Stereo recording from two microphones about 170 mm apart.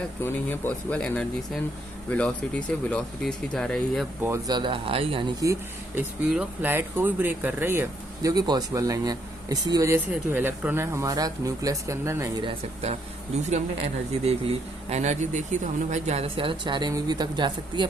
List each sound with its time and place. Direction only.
0.3 s speech: 10° left (ahead or behind)
4.2 s speech: 15° right (ahead or behind)
4.5 s speech: 30° right (ahead or behind)
6.2 s speech: 5° right (ahead or behind)
12.5 s speech: 40° right (ahead or behind)